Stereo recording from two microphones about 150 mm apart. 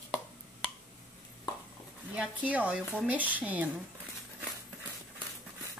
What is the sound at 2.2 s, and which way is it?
Speech, 10° right (ahead or behind).